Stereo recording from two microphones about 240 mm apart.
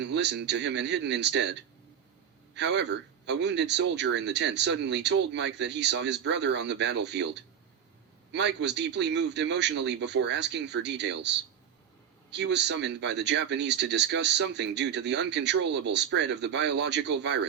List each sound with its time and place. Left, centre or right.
0.0 s speech: right
2.6 s speech: right